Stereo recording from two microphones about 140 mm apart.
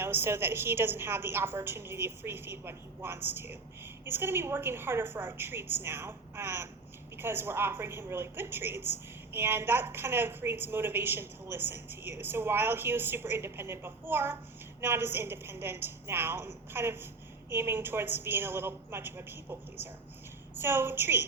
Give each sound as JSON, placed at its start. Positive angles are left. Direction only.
{"t": 0.0, "sound": "a woman's voice", "side_deg": -15}